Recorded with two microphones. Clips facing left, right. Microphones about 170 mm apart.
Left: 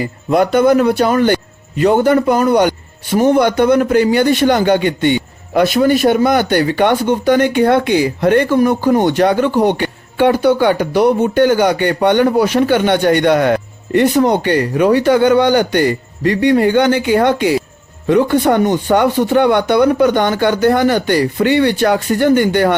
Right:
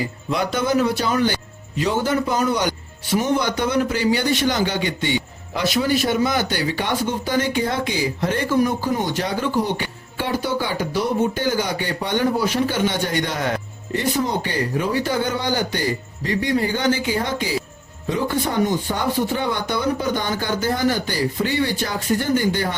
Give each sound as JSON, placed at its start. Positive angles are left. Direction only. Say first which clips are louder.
{"t": 0.0, "sound": "a man's voice", "louder": "left 9 dB", "side_deg": 55}